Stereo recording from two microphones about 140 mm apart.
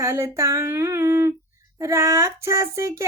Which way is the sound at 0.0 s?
20° right (ahead or behind).